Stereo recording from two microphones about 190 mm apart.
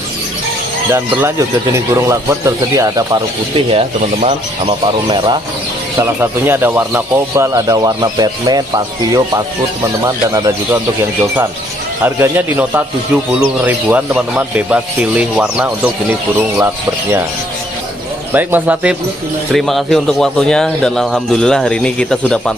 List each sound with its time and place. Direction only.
0.9 s speech: 15° right (ahead or behind)
3.5 s speech: 30° right (ahead or behind)
5.9 s speech: 10° right (ahead or behind)
12.0 s speech: 10° right (ahead or behind)
18.3 s speech: 10° right (ahead or behind)